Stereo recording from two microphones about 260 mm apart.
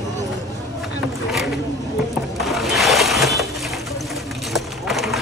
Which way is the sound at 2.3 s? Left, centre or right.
Centre.